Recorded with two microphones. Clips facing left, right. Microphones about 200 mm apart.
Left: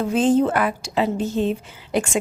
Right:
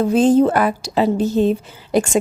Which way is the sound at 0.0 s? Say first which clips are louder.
Right 5 dB; 40° right (ahead or behind).